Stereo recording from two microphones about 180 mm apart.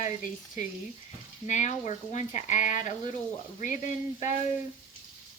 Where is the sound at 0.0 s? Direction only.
45° left (ahead or behind).